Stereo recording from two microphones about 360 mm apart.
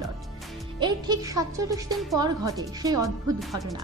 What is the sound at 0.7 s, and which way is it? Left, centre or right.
Speech, centre.